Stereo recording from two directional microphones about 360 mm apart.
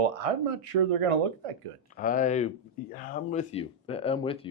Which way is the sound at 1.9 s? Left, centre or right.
Left.